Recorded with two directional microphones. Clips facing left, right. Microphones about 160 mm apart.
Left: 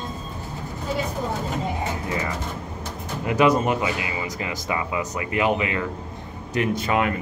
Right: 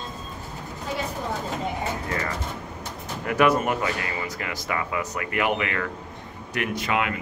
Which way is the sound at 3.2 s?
20° left (ahead or behind).